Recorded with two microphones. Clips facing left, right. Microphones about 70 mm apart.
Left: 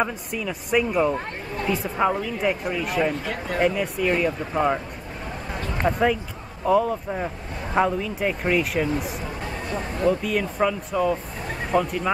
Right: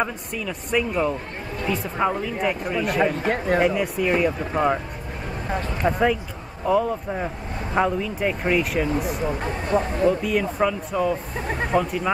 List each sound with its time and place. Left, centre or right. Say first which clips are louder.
0.0 s speech: left 1 dB; centre
3.0 s speech: right 3 dB; right
3.6 s speech: right 1 dB; centre
5.9 s speech: right 1 dB; centre